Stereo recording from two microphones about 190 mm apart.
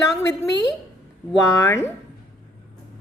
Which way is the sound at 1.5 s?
15° left (ahead or behind).